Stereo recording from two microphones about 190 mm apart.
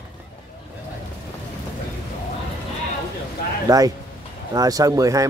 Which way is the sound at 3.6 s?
20° right (ahead or behind).